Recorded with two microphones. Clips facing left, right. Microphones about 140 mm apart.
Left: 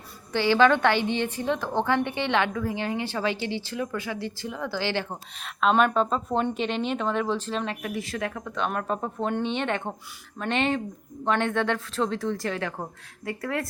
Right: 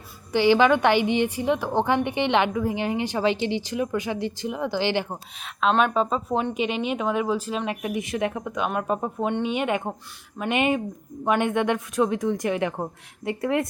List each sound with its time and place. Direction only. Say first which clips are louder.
0.3 s a woman's voice: right 2 dB; 15° right (ahead or behind)
5.5 s a woman's voice: even; centre (ahead or behind)
7.8 s a woman's voice: right 4 dB; 20° right (ahead or behind)